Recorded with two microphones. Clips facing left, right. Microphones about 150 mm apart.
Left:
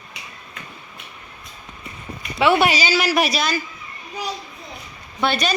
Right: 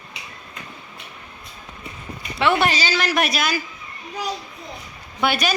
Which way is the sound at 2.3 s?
5° left (ahead or behind).